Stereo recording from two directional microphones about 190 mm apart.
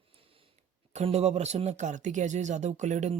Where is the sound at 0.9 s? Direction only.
35° right (ahead or behind).